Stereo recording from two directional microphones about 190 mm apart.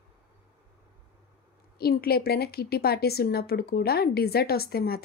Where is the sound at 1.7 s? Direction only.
55° left (ahead or behind).